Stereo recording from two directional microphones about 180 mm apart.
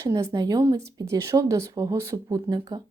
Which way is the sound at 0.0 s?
15° right (ahead or behind).